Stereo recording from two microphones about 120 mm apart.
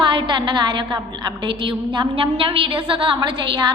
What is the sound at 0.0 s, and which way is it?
A woman's voice, 45° right (ahead or behind).